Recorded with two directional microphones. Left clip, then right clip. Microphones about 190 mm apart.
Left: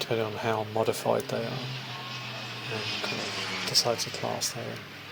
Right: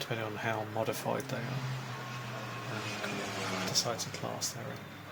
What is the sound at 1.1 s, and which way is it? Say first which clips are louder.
Speech: left 10 dB; 25° left (ahead or behind).